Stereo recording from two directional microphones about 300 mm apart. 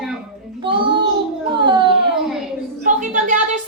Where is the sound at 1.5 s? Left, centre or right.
Centre.